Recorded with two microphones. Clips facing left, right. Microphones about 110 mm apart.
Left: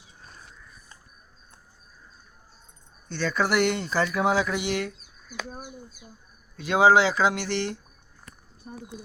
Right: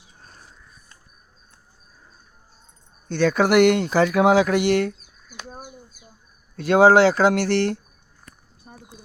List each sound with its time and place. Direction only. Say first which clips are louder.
3.1 s speech: right 7 dB; 65° right (ahead or behind)
6.6 s speech: right 5 dB; 65° right (ahead or behind)
8.7 s a sound: left 5 dB; 15° right (ahead or behind)